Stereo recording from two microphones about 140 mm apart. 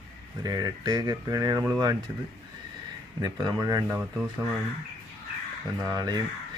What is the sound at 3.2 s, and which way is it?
Speech, 30° right (ahead or behind).